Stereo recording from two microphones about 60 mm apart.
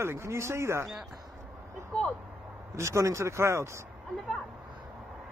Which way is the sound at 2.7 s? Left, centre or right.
Right.